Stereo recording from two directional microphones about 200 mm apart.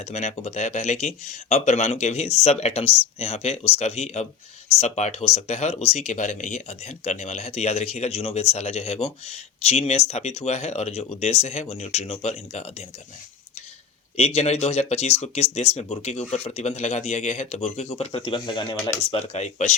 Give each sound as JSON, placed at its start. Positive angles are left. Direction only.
{"t": 0.0, "sound": "speech", "side_deg": 35}
{"t": 14.2, "sound": "speech", "side_deg": 30}